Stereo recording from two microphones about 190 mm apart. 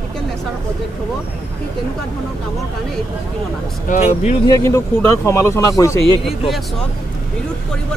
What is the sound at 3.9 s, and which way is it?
Speech, 45° left (ahead or behind).